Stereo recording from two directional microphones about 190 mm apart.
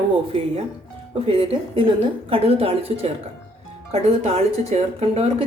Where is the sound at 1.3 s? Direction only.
30° right (ahead or behind).